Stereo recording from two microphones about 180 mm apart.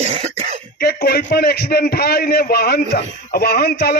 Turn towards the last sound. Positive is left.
turn(degrees=60)  # may be behind; listen again after turning